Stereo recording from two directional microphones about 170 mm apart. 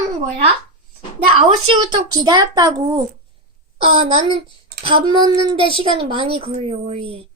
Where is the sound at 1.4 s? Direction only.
35° right (ahead or behind).